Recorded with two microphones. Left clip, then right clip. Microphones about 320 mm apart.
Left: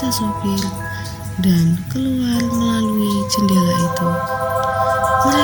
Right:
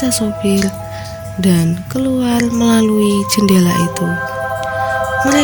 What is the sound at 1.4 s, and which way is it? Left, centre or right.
Music, right.